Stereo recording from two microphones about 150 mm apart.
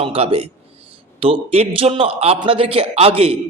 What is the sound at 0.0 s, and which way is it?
A man's voice, 40° right (ahead or behind).